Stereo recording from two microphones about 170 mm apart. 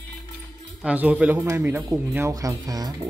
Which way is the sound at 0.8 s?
10° right (ahead or behind).